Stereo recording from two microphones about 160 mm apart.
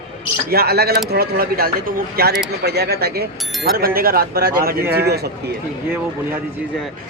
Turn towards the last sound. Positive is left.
turn(degrees=-85)